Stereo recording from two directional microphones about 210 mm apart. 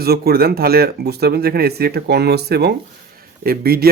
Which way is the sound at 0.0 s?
50° right (ahead or behind).